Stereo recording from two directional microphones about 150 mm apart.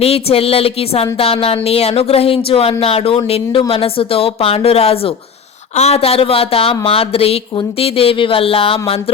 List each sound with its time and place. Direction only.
0.0 s speech: 40° left (ahead or behind)